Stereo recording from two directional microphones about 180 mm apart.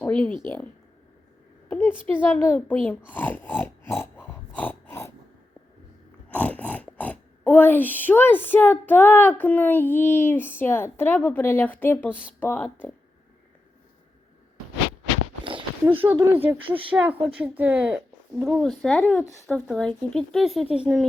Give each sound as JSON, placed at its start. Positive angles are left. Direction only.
{"t": 0.0, "sound": "a child's voice", "side_deg": 10}
{"t": 1.7, "sound": "a woman's voice", "side_deg": 10}
{"t": 3.1, "sound": "a sound", "side_deg": 10}
{"t": 6.2, "sound": "a child's voice", "side_deg": 10}
{"t": 15.9, "sound": "speech", "side_deg": -10}
{"t": 16.6, "sound": "speech", "side_deg": -30}
{"t": 16.9, "sound": "speech", "side_deg": -10}